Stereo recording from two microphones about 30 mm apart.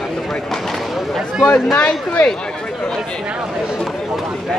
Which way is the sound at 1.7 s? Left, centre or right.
Left.